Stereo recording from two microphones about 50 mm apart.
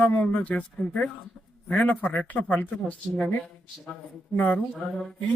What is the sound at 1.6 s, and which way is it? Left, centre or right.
Speech, left.